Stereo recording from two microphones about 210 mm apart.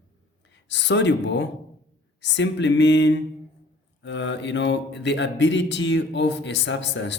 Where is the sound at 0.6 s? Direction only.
55° left (ahead or behind).